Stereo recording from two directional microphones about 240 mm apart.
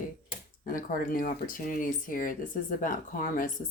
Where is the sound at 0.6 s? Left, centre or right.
Left.